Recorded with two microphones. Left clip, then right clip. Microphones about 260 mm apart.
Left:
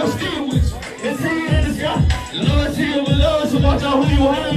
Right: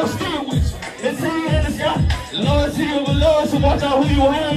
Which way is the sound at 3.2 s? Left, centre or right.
Centre.